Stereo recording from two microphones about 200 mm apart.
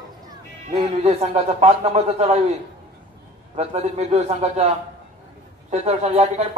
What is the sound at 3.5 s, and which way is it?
A man's voice, 30° right (ahead or behind).